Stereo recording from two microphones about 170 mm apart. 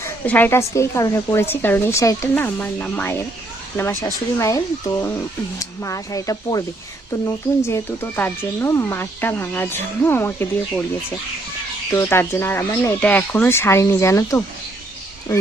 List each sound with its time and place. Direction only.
0.0 s speech: 10° left (ahead or behind)
11.9 s speech: 15° left (ahead or behind)